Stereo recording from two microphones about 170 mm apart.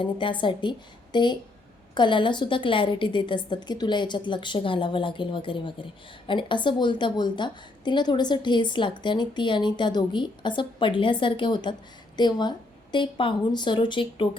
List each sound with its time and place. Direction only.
0.0 s a woman's voice: 30° left (ahead or behind)